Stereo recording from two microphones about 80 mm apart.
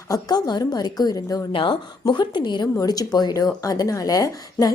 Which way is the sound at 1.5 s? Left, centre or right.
Left.